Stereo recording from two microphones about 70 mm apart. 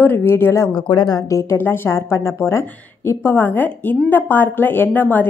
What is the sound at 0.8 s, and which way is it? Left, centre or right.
Speech, left.